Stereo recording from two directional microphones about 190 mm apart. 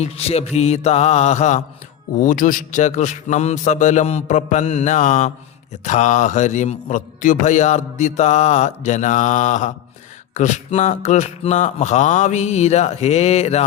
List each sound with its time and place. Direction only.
0.0 s a man's voice: 35° left (ahead or behind)